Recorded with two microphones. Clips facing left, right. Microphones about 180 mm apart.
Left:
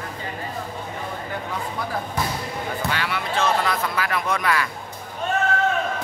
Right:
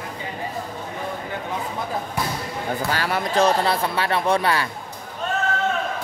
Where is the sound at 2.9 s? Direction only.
40° right (ahead or behind).